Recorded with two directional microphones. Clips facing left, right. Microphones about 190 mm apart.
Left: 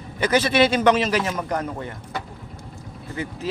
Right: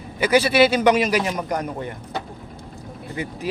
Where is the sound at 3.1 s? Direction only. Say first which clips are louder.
Even; 15° right (ahead or behind).